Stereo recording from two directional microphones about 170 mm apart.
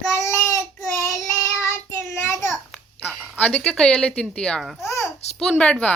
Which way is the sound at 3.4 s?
5° left (ahead or behind).